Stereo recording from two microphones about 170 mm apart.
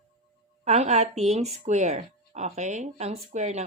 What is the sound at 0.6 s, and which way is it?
A woman's voice, 40° right (ahead or behind).